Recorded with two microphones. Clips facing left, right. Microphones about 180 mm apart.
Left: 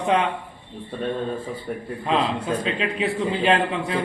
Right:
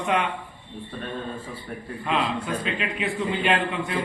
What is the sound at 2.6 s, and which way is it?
A man's voice, 30° left (ahead or behind).